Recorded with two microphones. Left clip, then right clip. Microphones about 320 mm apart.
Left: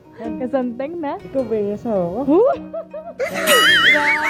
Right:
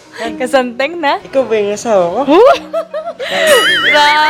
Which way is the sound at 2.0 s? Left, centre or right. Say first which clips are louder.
Right 9 dB; centre.